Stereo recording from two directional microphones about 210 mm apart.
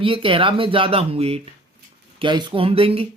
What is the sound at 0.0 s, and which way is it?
Speech, 25° right (ahead or behind).